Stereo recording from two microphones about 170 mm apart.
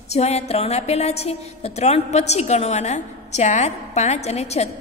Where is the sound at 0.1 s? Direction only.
40° left (ahead or behind).